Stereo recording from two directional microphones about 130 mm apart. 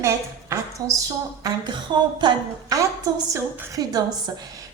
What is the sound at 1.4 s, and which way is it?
A woman's voice, 35° right (ahead or behind).